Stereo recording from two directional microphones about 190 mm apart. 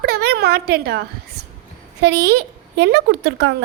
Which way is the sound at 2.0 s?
60° right (ahead or behind).